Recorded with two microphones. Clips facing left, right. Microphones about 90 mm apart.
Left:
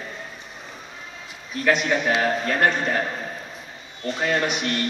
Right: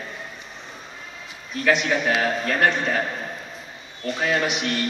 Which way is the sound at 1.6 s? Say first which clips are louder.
Even; centre (ahead or behind).